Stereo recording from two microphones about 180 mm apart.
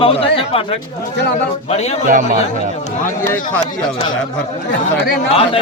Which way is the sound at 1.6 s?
35° left (ahead or behind).